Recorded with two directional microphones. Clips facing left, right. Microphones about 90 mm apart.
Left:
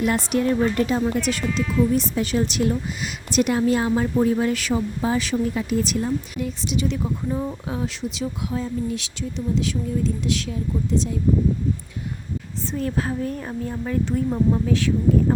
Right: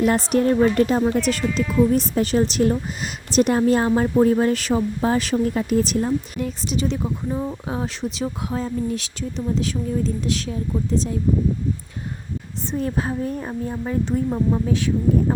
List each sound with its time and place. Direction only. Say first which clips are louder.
0.0 s a woman's voice: right 3 dB; 40° right (ahead or behind)
7.0 s speech: even; 10° right (ahead or behind)
7.7 s a woman's voice: right 1 dB; 40° right (ahead or behind)
12.7 s a woman's voice: right 1 dB; 20° right (ahead or behind)